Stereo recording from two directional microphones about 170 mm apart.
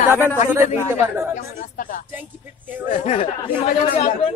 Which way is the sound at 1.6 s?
50° left (ahead or behind).